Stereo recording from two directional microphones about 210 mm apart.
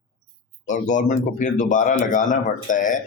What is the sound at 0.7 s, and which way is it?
Speech, 35° left (ahead or behind).